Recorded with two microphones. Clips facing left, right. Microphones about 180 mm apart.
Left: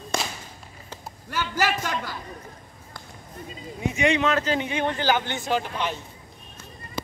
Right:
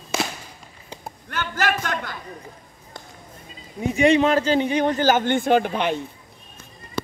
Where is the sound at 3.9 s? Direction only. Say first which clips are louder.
Right 6 dB; 35° right (ahead or behind); by 5.9 s 60° right (ahead or behind).